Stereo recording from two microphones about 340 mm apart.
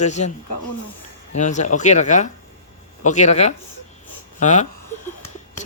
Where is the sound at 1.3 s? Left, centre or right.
Left.